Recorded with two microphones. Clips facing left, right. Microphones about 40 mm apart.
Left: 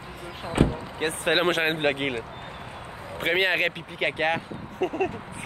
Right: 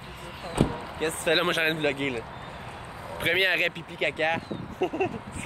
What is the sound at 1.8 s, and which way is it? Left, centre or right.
Speech, left.